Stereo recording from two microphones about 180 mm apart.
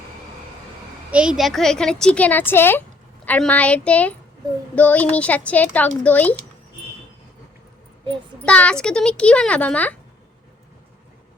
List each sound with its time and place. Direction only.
1.1 s a woman's voice: 5° right (ahead or behind)
8.4 s a woman's voice: 5° left (ahead or behind)